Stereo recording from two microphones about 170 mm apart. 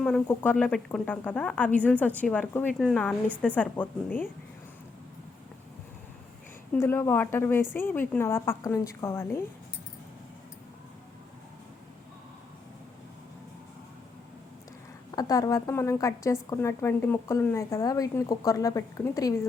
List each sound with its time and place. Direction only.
0.0 s a woman's voice: 5° left (ahead or behind)
6.7 s a woman's voice: 15° left (ahead or behind)
15.1 s a woman's voice: 20° left (ahead or behind)